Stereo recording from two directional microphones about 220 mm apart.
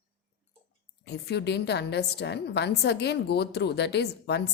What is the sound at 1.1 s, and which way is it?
A woman's voice, 50° left (ahead or behind).